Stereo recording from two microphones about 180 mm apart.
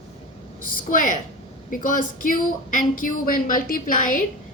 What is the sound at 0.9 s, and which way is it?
A woman's voice, 45° left (ahead or behind).